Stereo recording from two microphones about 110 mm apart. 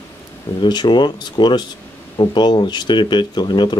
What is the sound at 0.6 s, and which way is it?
Speech, 45° left (ahead or behind).